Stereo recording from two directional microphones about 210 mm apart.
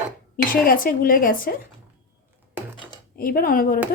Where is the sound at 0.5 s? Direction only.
40° left (ahead or behind).